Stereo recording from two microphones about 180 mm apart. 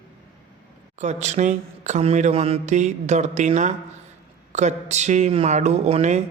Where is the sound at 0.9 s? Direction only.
40° right (ahead or behind).